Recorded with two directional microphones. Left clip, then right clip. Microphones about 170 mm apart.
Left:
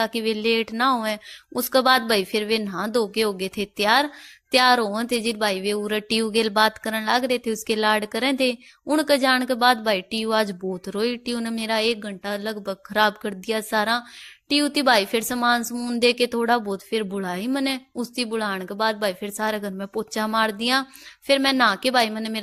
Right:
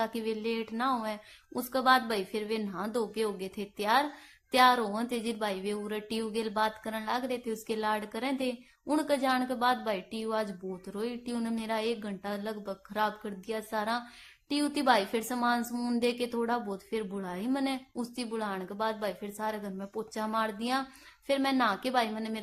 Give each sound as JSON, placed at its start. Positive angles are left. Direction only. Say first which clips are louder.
{"t": 0.0, "sound": "speech", "louder": "left 10 dB", "side_deg": 30}
{"t": 15.7, "sound": "speech", "louder": "left 5 dB", "side_deg": 20}
{"t": 16.0, "sound": "speech", "louder": "left 12 dB", "side_deg": 35}